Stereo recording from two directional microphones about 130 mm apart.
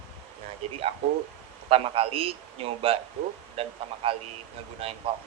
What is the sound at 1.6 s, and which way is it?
A man's voice, 50° right (ahead or behind).